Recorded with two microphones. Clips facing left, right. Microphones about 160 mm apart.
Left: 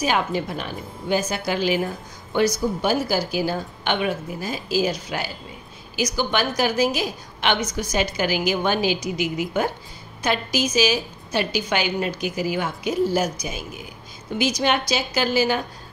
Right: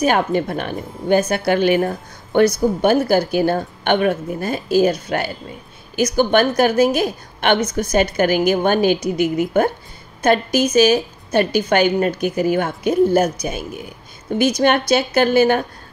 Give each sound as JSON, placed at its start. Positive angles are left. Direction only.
{"t": 0.0, "sound": "a woman's voice", "side_deg": -55}